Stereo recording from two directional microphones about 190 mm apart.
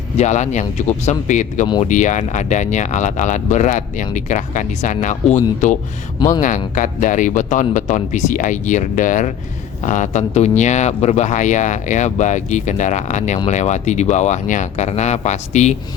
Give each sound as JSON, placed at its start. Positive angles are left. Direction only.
{"t": 0.2, "sound": "speech", "side_deg": 40}
{"t": 6.1, "sound": "speech", "side_deg": 20}
{"t": 6.4, "sound": "speech", "side_deg": 40}